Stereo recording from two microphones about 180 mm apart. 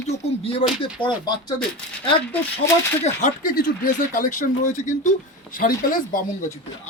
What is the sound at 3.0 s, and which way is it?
Speech, 45° left (ahead or behind).